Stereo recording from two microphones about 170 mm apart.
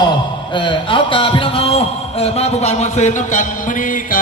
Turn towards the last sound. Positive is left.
turn(degrees=50)  # may be behind; listen again after turning